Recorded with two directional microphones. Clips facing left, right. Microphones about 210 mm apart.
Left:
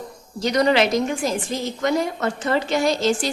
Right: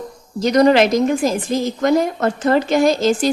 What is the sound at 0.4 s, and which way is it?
A woman's voice, 45° right (ahead or behind).